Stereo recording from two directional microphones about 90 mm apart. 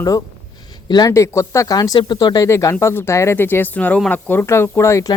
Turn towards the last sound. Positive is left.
turn(degrees=35)  # may be behind; listen again after turning